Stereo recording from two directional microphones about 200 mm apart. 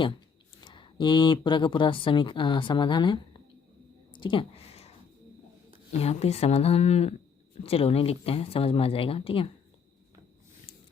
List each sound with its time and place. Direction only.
0.6 s speech: 25° left (ahead or behind)
4.1 s a sound: 25° left (ahead or behind)
6.0 s a woman's voice: 30° left (ahead or behind)